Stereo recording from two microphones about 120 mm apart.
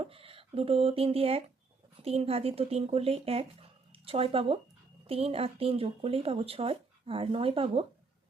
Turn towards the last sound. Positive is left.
turn(degrees=-50)  # may be behind; listen again after turning